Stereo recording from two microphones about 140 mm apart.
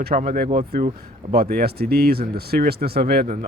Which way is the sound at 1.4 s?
90° right.